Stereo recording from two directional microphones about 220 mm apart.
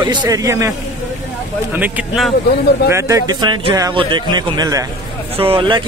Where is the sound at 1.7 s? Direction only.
10° right (ahead or behind).